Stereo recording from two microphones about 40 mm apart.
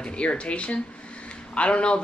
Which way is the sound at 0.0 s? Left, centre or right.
Left.